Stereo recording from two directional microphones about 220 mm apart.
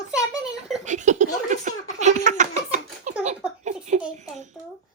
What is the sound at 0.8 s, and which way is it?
A child's voice, 35° right (ahead or behind).